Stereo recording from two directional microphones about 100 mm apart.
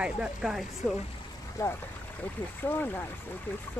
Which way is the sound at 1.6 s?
30° left (ahead or behind).